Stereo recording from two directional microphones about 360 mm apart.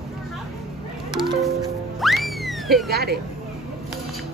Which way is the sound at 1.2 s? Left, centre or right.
Centre.